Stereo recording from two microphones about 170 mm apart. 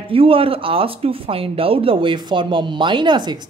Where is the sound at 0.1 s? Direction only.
35° right (ahead or behind).